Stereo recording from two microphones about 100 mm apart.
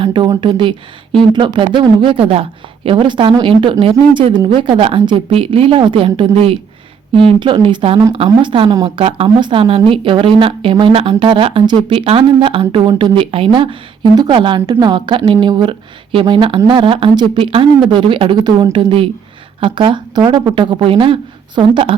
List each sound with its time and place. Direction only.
0.4 s a woman's voice: 55° right (ahead or behind)
8.4 s speech: 55° right (ahead or behind)
9.0 s speech: 70° right (ahead or behind); by 11.8 s 55° right (ahead or behind)
11.9 s speech: 65° right (ahead or behind)
14.7 s a woman's voice: 45° right (ahead or behind)
20.9 s speech: 70° right (ahead or behind)
21.5 s a woman's voice: 50° right (ahead or behind)